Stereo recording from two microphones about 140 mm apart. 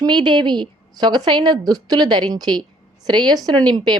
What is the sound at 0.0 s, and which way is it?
A woman's voice, 30° right (ahead or behind).